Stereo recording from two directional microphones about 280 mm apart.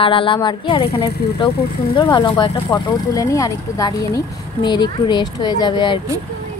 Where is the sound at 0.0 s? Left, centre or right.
Centre.